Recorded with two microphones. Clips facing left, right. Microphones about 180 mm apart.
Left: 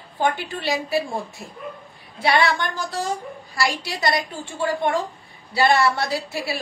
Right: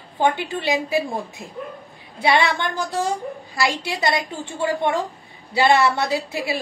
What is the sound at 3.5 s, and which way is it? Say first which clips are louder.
Speech: right 1 dB; 20° right (ahead or behind).